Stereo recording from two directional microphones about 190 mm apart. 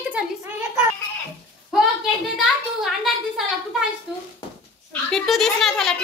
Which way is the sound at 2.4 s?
Centre (ahead or behind).